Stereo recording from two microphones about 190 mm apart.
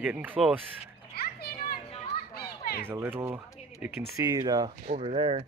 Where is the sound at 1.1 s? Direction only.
55° left (ahead or behind).